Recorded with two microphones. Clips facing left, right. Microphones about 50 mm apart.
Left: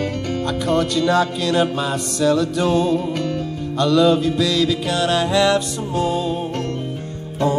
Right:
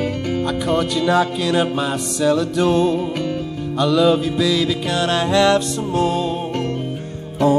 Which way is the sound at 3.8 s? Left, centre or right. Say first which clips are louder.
Even; centre.